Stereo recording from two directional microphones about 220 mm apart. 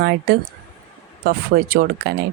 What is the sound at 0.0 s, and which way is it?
Speech, 55° right (ahead or behind).